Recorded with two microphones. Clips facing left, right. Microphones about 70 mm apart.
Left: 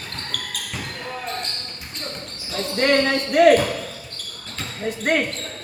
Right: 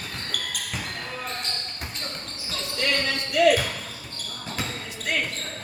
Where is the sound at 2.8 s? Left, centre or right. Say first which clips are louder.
Left 8 dB; left.